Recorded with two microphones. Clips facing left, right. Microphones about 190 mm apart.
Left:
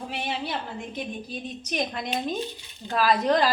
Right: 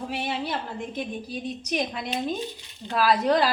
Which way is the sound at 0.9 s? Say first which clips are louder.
Right 1 dB; 5° right (ahead or behind).